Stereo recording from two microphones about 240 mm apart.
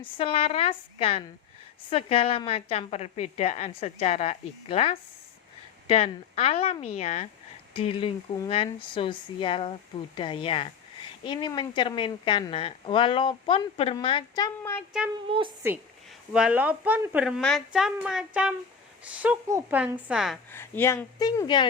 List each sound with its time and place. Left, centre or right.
0.0 s a woman's voice: left
15.3 s a woman's voice: right
16.3 s a woman's voice: centre
20.5 s speech: centre